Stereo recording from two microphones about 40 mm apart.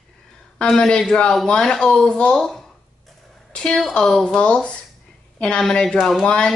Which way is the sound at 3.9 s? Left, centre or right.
Centre.